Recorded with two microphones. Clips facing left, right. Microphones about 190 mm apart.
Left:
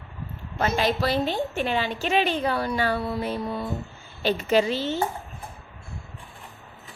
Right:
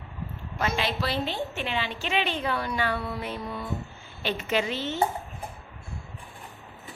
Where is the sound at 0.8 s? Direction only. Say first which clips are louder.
Left 8 dB; 45° left (ahead or behind).